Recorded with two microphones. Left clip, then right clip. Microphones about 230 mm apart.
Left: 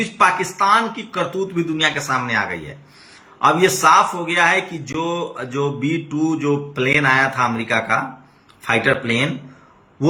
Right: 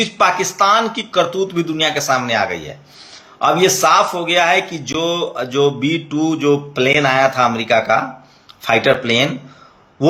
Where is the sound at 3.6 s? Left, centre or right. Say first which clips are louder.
Right 1 dB; centre.